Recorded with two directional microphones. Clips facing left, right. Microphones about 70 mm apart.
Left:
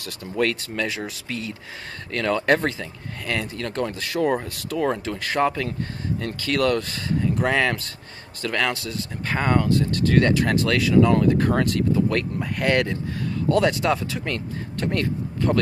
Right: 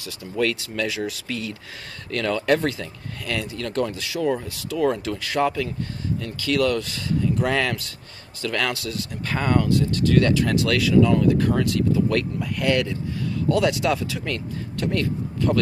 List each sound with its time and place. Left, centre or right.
0.0 s speech: left
4.0 s speech: left
4.7 s speech: left
7.4 s speech: centre; by 12.0 s left
12.1 s speech: left